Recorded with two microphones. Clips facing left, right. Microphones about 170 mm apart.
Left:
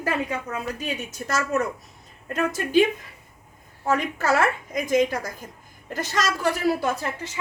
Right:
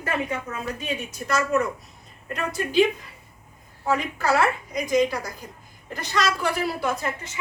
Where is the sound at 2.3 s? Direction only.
45° left (ahead or behind).